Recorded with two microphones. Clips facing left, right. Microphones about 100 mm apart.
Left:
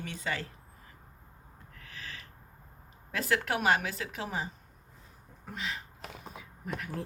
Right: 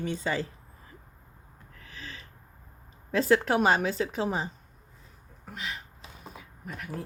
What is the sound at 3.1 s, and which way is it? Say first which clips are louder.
Speech: right 7 dB; 30° right (ahead or behind).